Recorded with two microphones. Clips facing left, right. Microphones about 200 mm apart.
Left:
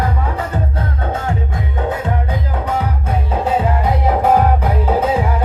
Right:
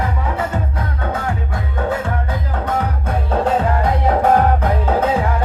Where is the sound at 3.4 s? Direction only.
5° left (ahead or behind).